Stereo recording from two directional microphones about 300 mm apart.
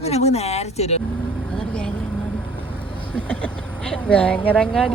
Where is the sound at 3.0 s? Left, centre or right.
Centre.